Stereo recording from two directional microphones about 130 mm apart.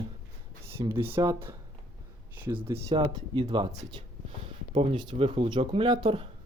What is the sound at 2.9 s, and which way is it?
Speech, 35° right (ahead or behind).